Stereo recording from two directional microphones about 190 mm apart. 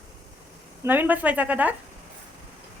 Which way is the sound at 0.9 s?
10° right (ahead or behind).